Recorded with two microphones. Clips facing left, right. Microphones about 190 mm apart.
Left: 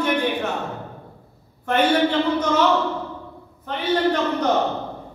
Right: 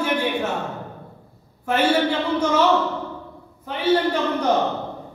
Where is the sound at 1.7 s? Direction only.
10° right (ahead or behind).